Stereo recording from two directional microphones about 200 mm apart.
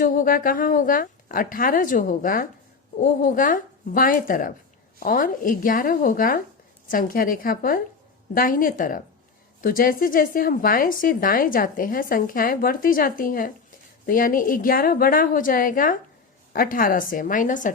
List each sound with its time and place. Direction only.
0.0 s speech: 45° left (ahead or behind)